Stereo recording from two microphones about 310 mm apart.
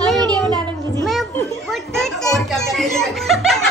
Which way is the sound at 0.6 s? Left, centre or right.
Centre.